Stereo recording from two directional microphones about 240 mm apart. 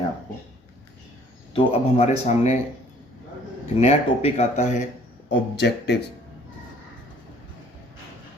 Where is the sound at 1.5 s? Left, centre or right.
Left.